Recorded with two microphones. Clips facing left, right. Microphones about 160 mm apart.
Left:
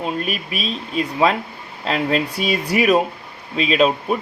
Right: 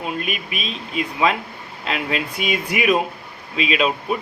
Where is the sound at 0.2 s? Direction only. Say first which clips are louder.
Left 3 dB; 35° left (ahead or behind).